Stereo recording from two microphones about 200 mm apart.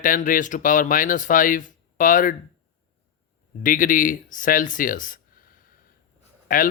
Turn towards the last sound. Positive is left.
turn(degrees=45)  # may be behind; listen again after turning